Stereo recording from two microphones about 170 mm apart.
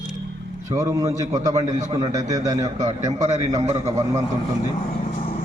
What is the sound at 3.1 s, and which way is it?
Speech, 45° right (ahead or behind).